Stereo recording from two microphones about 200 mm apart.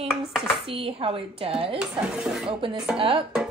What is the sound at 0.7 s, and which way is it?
Speech, 25° right (ahead or behind).